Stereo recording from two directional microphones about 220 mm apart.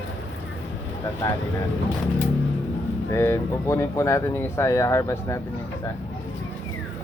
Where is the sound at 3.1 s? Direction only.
10° left (ahead or behind).